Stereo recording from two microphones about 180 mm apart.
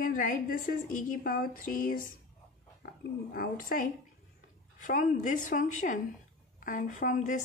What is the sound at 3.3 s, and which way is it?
A woman's voice, 50° left (ahead or behind).